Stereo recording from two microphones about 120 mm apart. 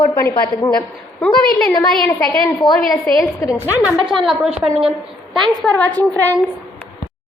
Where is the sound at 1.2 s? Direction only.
5° left (ahead or behind).